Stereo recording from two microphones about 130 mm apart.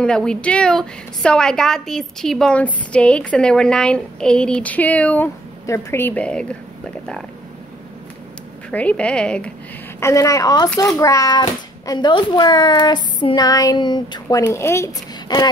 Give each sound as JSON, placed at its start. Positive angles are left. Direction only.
{"t": 0.0, "sound": "a woman's voice", "side_deg": 5}
{"t": 8.6, "sound": "a woman's voice", "side_deg": 10}
{"t": 9.9, "sound": "a child's voice", "side_deg": 25}
{"t": 14.5, "sound": "speech", "side_deg": 20}
{"t": 15.3, "sound": "a child's voice", "side_deg": 35}